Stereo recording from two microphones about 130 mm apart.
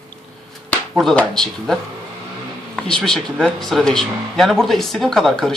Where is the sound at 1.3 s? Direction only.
Centre (ahead or behind).